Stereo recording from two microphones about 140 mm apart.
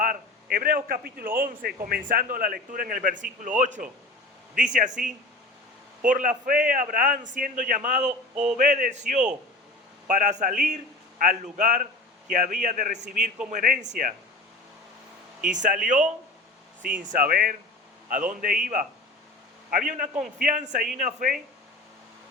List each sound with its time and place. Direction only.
0.0 s a sound: 85° right
0.9 s a man's voice: 90° right; by 4.9 s 65° right (ahead or behind)
6.1 s a man's voice: 75° right (ahead or behind)
15.4 s a man's voice: 65° right (ahead or behind); by 17.6 s 85° right
18.1 s a man's voice: 75° right (ahead or behind)
19.9 s a man's voice: 60° right (ahead or behind)
20.4 s a man's voice: 70° right (ahead or behind)